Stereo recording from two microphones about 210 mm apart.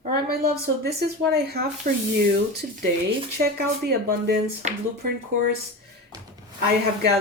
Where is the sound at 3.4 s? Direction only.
50° right (ahead or behind).